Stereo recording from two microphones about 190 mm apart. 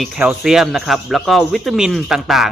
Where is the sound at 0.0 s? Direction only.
5° right (ahead or behind).